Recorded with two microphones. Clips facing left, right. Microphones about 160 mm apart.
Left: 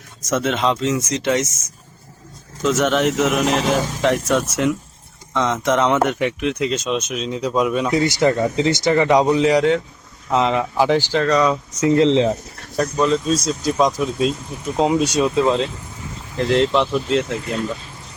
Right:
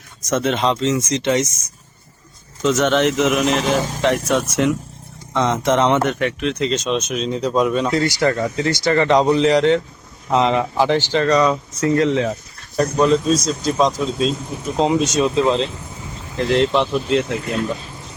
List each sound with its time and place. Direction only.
0.3 s speech: centre (ahead or behind)
2.6 s speech: 5° left (ahead or behind)
6.1 s speech: 15° left (ahead or behind)
11.8 s speech: 20° left (ahead or behind)
12.7 s speech: centre (ahead or behind)